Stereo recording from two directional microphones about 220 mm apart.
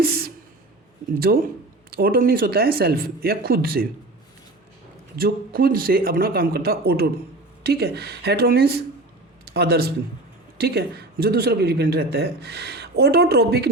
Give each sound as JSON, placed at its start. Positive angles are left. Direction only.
{"t": 0.0, "sound": "a sound", "side_deg": -45}
{"t": 1.3, "sound": "a man's voice", "side_deg": -40}
{"t": 5.1, "sound": "a man's voice", "side_deg": -40}